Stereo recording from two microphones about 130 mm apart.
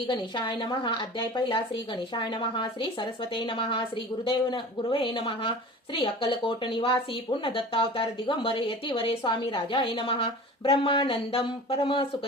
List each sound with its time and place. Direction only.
0.1 s speech: 40° left (ahead or behind)